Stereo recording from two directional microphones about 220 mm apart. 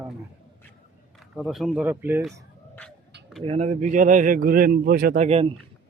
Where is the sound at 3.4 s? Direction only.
30° right (ahead or behind).